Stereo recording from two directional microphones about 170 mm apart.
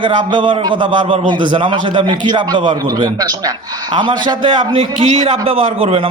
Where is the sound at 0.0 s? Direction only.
30° right (ahead or behind).